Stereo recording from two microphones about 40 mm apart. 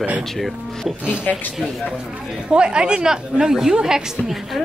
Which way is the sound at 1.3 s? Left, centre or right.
Left.